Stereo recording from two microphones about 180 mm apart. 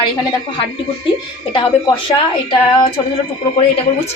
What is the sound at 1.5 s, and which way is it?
A woman's voice, 30° left (ahead or behind).